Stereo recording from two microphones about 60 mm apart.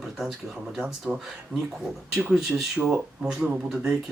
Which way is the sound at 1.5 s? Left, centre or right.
Centre.